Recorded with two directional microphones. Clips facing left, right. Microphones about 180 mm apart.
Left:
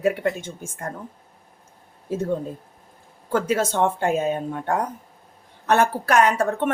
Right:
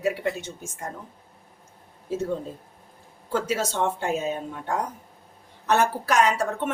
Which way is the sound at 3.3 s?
55° left (ahead or behind).